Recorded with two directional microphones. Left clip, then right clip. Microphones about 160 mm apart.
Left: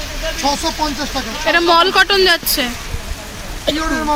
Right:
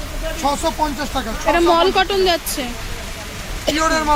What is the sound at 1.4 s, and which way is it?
Speech, centre (ahead or behind).